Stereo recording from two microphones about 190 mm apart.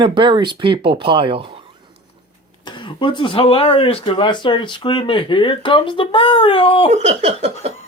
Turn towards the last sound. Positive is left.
turn(degrees=-35)  # may be behind; listen again after turning